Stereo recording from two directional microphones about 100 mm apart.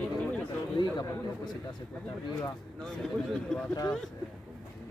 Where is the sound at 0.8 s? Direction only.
45° left (ahead or behind).